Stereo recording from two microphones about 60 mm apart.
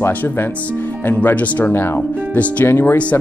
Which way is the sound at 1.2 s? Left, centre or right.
Left.